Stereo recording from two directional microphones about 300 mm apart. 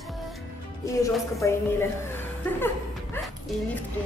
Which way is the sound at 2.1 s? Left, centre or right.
Centre.